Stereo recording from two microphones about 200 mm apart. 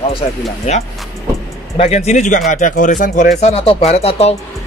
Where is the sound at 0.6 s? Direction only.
35° left (ahead or behind).